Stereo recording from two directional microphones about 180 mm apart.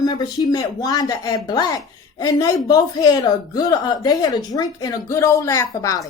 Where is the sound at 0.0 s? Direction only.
25° left (ahead or behind).